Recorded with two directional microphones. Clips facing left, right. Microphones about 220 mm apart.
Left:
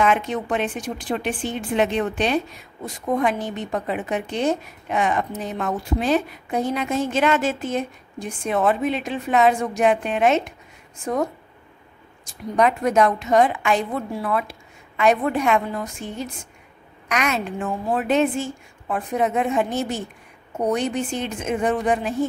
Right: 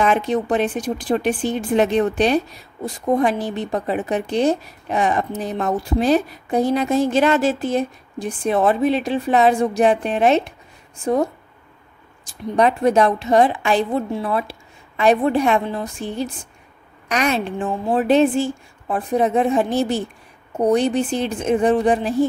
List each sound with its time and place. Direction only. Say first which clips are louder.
0.0 s a woman's voice: right 3 dB; 35° right (ahead or behind)
12.3 s a woman's voice: right 2 dB; 30° right (ahead or behind)